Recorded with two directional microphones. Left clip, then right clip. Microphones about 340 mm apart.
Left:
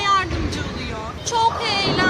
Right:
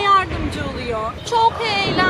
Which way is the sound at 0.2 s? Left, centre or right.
Centre.